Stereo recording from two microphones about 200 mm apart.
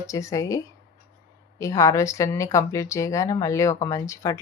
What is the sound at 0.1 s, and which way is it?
Speech, 15° left (ahead or behind).